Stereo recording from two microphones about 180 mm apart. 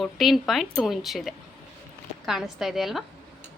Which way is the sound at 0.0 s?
Centre (ahead or behind).